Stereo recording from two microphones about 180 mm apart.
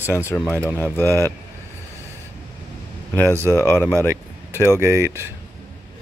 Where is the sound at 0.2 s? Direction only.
15° left (ahead or behind).